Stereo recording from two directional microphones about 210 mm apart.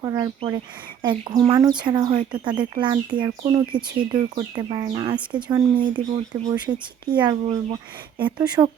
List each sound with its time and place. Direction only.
0.0 s speech: 20° right (ahead or behind)